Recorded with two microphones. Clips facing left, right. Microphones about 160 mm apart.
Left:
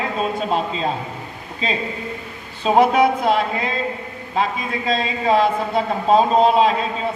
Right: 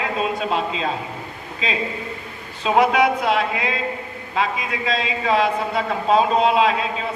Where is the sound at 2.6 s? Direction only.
45° left (ahead or behind).